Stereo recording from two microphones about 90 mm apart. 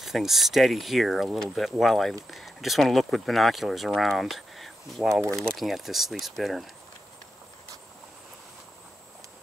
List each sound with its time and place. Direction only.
0.0 s speech: centre (ahead or behind)